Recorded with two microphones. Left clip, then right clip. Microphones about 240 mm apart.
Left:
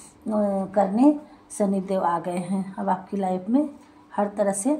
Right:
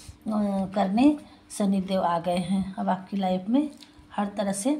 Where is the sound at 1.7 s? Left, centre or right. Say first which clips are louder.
Even; right.